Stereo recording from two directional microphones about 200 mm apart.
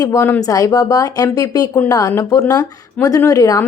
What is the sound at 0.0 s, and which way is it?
A woman's voice, 15° left (ahead or behind).